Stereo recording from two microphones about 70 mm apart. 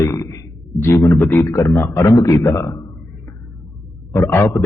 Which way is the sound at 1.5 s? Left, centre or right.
Left.